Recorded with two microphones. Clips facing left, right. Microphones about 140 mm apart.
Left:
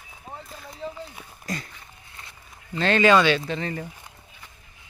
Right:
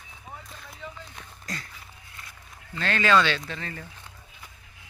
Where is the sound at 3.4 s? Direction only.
20° left (ahead or behind).